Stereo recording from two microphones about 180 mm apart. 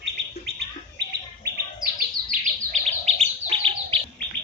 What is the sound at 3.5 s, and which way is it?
Bird, 30° right (ahead or behind).